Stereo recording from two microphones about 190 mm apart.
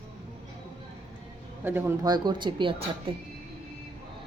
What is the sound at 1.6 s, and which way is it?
Speech, 10° right (ahead or behind).